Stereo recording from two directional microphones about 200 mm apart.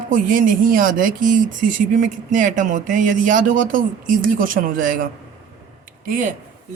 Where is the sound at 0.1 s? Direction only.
40° right (ahead or behind).